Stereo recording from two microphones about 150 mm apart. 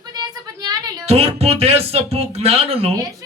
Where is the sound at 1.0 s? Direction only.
45° right (ahead or behind).